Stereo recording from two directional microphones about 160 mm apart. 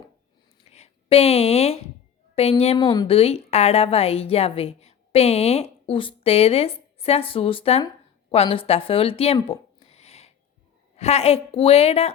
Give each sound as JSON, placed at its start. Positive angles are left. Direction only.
{"t": 0.7, "sound": "a woman's voice", "side_deg": 40}